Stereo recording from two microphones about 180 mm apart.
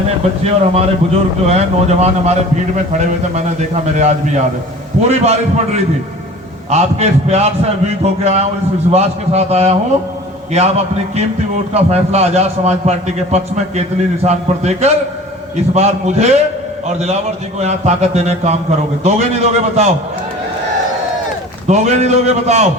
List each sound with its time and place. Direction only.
0.4 s a man's voice: 35° right (ahead or behind)
5.0 s a man's voice: 35° right (ahead or behind)
21.7 s a man's voice: 40° right (ahead or behind)